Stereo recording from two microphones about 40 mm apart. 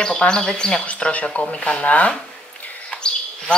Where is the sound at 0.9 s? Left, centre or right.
Left.